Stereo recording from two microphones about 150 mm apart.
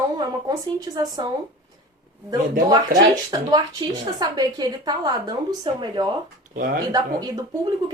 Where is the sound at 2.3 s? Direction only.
25° right (ahead or behind).